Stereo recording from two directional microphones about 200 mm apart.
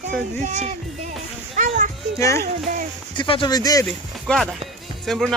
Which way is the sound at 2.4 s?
45° right (ahead or behind).